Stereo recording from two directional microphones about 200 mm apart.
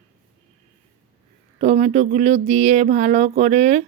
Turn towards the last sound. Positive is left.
turn(degrees=-35)  # may be behind; listen again after turning